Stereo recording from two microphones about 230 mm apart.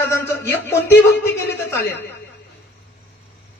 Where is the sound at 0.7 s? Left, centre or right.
Centre.